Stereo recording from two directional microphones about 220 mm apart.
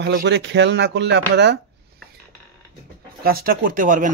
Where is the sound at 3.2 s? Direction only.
40° right (ahead or behind).